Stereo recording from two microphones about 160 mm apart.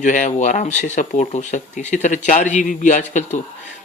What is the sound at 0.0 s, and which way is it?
Speech, 50° left (ahead or behind).